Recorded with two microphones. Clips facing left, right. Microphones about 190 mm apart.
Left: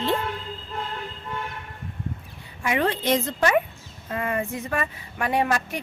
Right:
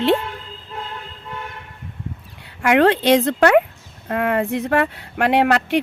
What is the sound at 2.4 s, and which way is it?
Speech, 75° right (ahead or behind).